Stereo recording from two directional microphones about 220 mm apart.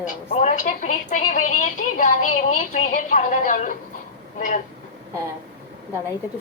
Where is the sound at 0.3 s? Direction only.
35° left (ahead or behind).